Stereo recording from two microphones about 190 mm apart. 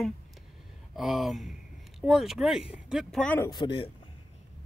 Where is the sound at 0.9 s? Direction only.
Centre (ahead or behind).